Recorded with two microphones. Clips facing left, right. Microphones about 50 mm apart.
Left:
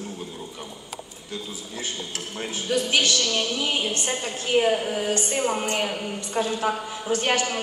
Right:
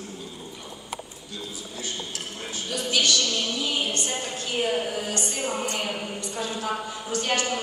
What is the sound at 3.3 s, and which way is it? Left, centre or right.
Music, left.